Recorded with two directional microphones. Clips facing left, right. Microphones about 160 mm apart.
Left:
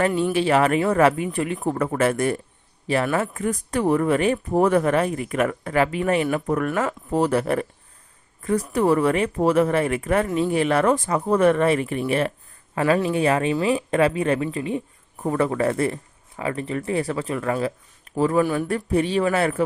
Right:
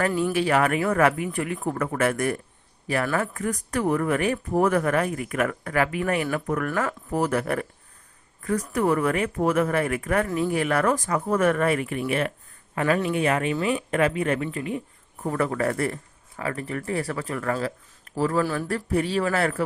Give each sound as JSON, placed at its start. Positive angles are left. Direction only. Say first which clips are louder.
{"t": 0.0, "sound": "a woman's voice", "louder": "left 3 dB", "side_deg": 25}